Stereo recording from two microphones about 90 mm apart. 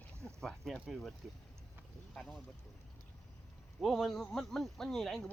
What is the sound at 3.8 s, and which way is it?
Speech, centre (ahead or behind).